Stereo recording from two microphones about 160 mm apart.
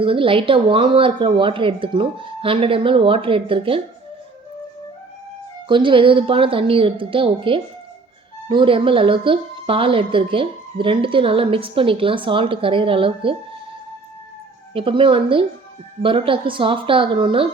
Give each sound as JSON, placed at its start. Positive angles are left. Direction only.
{"t": 0.0, "sound": "a woman's voice", "side_deg": -35}
{"t": 5.6, "sound": "a woman's voice", "side_deg": -30}
{"t": 14.7, "sound": "a woman's voice", "side_deg": -35}